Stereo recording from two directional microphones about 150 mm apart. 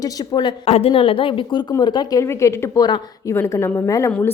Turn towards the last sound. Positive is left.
turn(degrees=10)  # may be behind; listen again after turning